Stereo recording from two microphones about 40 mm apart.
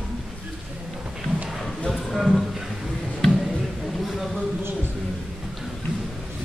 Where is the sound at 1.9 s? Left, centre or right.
Centre.